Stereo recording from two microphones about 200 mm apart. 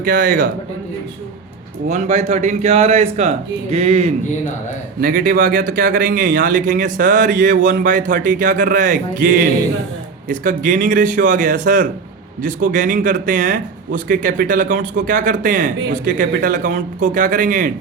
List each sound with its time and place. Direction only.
0.0 s speech: 45° right (ahead or behind)
1.9 s a man's voice: 35° right (ahead or behind)
4.9 s a man's voice: 45° right (ahead or behind)